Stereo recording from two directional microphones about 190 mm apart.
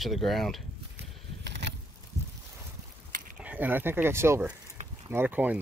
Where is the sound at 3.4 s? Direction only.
10° right (ahead or behind).